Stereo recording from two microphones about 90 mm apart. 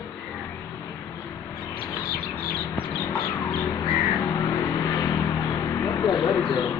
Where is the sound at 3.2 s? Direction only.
45° left (ahead or behind).